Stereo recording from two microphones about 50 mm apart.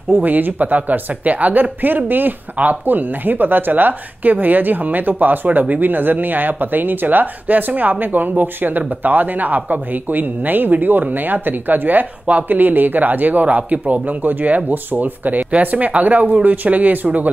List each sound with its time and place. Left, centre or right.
0.1 s speech: right